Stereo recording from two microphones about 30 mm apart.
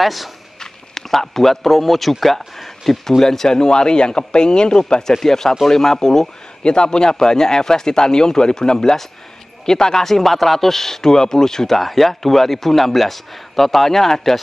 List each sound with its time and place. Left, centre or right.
0.0 s speech: centre
0.6 s speech: centre
5.1 s speech: centre
6.6 s speech: left
8.7 s speech: centre